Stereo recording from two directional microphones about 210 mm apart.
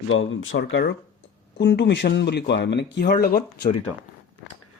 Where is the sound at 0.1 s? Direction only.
70° left (ahead or behind); by 3.7 s 45° left (ahead or behind).